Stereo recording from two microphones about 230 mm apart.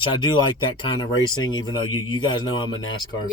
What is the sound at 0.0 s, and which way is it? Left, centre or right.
Speech, centre.